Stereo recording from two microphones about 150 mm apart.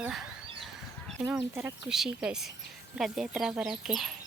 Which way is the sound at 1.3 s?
10° right (ahead or behind).